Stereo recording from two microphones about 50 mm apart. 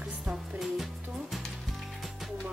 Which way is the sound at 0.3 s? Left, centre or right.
Centre.